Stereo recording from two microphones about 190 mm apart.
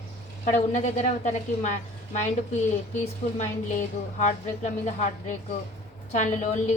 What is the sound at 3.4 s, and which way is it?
A woman's voice, 40° left (ahead or behind).